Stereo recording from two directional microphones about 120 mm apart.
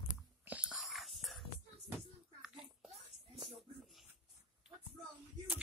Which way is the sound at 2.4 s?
5° right (ahead or behind).